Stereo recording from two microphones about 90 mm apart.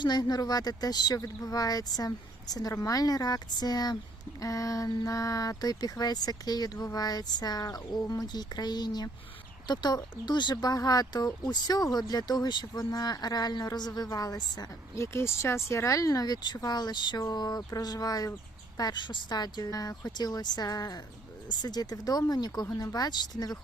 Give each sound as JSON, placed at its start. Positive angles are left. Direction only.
{"t": 0.0, "sound": "speech", "side_deg": 50}
{"t": 4.4, "sound": "a sound", "side_deg": 40}
{"t": 5.0, "sound": "speech", "side_deg": 40}
{"t": 14.9, "sound": "speech", "side_deg": 30}